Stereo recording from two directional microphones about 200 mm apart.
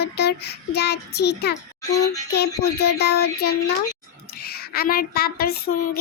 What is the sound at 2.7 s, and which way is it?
Child singing, 55° left (ahead or behind).